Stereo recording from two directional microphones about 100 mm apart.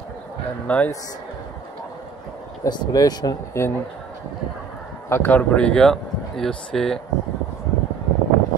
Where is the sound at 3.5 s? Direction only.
30° left (ahead or behind).